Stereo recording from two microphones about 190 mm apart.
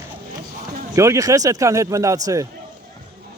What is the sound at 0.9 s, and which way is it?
A man's voice, 15° right (ahead or behind).